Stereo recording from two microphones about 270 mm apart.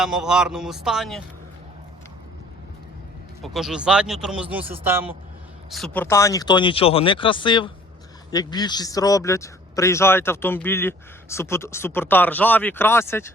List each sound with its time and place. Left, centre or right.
0.0 s a man's voice: centre
3.4 s a man's voice: centre
5.7 s a man's voice: centre